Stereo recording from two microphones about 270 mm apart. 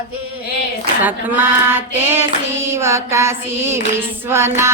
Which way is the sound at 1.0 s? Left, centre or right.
Centre.